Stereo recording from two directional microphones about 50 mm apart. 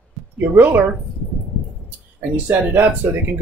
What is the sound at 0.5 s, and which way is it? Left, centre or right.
Speech, right.